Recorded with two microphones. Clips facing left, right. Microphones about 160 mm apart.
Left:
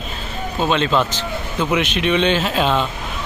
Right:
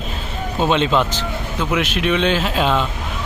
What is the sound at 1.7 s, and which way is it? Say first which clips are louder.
Speech: even; 5° right (ahead or behind).